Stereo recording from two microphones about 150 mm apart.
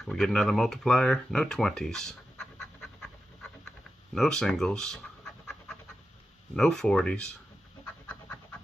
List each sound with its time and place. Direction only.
0.0 s speech: centre (ahead or behind)
2.6 s pant: centre (ahead or behind)
4.1 s pant: 5° left (ahead or behind)
6.5 s speech: 5° left (ahead or behind)